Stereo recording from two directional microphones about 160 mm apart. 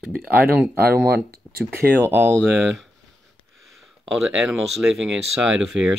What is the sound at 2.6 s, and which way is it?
Speech, centre (ahead or behind).